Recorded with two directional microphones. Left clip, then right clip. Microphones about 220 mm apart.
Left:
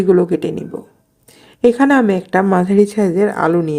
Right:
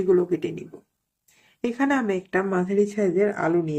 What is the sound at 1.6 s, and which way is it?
A woman's voice, 45° left (ahead or behind).